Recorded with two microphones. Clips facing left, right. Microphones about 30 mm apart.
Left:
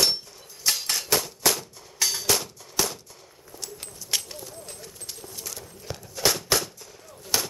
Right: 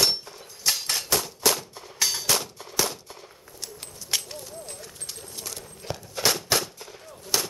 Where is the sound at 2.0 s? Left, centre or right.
Centre.